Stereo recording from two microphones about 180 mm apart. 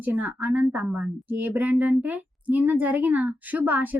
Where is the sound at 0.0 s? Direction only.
10° right (ahead or behind).